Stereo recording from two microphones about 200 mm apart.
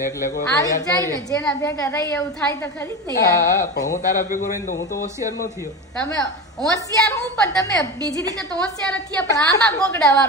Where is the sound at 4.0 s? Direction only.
40° left (ahead or behind).